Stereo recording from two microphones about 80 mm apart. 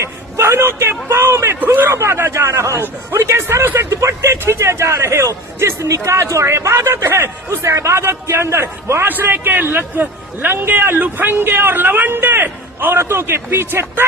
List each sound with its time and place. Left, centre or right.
0.0 s a man's voice: right
9.0 s a man's voice: right